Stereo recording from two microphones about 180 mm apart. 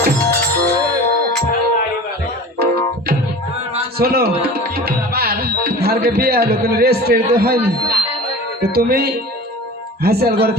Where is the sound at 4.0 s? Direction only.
60° right (ahead or behind).